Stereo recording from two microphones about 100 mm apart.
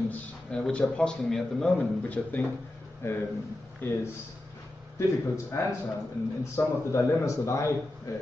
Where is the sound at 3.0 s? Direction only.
25° left (ahead or behind).